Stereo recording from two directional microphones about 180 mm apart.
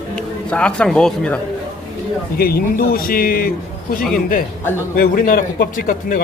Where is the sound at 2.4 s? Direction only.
55° left (ahead or behind).